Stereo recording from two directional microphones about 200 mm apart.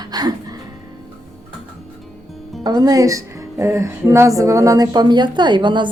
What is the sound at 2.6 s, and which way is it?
A woman's voice, 20° right (ahead or behind).